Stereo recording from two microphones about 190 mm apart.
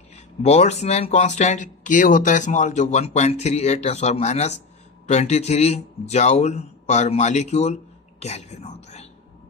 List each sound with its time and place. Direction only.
0.1 s speech: 35° left (ahead or behind)